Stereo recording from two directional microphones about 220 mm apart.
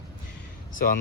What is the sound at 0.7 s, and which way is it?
Speech, 40° left (ahead or behind).